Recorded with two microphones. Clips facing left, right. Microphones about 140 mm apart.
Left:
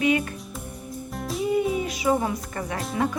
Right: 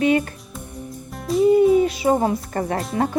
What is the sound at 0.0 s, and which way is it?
Speech, 30° right (ahead or behind).